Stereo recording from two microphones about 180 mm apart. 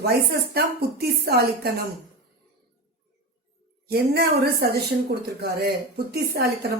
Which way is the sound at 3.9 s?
60° right (ahead or behind).